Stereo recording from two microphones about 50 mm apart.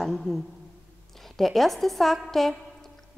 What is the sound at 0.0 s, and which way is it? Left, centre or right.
A woman's voice, centre.